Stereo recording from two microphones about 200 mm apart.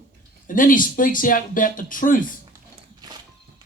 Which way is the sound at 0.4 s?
40° left (ahead or behind).